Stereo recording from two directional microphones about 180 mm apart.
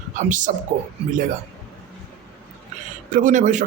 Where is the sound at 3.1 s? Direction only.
45° right (ahead or behind).